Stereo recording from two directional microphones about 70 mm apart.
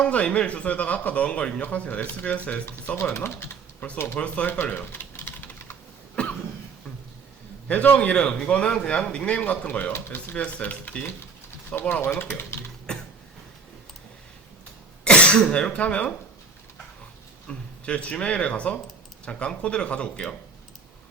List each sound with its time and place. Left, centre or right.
0.0 s speech: centre
2.9 s speech: left
4.2 s speech: centre
4.6 s typing: left
6.2 s cough: centre
7.7 s speech: centre
9.9 s speech: left
10.3 s speech: centre
15.0 s speech: centre
17.5 s speech: centre